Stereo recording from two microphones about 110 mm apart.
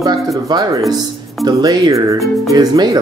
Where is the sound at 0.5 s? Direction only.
40° right (ahead or behind).